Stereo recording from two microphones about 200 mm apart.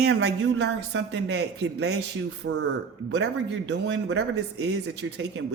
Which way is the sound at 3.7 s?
60° right (ahead or behind).